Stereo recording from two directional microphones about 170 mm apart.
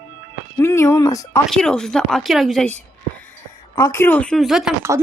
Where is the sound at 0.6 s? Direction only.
15° left (ahead or behind).